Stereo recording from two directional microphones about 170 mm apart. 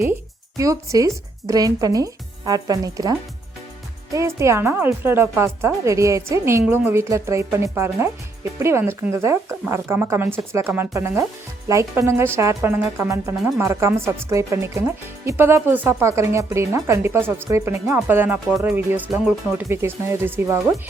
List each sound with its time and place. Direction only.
0.5 s speech: 20° right (ahead or behind)